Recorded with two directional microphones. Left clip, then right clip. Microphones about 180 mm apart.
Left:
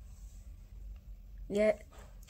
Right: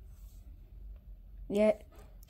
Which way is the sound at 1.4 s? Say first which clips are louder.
Right 1 dB; 15° right (ahead or behind).